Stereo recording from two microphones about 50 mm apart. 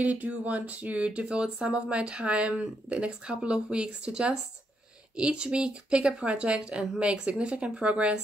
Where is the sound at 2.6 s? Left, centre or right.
Centre.